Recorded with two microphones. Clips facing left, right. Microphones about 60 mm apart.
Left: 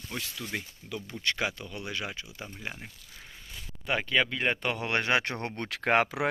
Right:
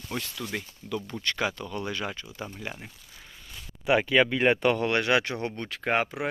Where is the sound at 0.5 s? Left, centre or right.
Centre.